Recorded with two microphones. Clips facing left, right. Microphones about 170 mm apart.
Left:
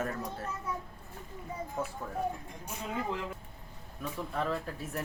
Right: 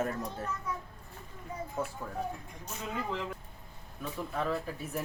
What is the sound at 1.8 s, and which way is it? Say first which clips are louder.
Speech: right 1 dB; centre (ahead or behind).